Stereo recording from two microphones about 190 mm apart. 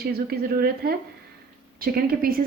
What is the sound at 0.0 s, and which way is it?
A woman's voice, 55° right (ahead or behind).